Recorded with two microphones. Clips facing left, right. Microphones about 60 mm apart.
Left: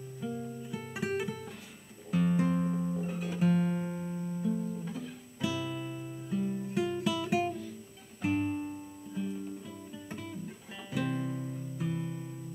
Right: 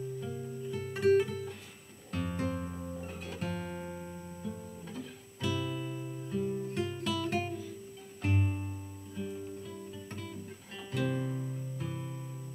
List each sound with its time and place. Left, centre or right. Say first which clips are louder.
0.2 s music: left 1 dB; centre
2.0 s guitar: left 6 dB; centre
8.2 s music: left 4 dB; centre